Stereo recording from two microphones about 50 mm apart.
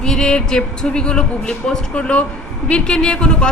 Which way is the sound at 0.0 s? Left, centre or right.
Centre.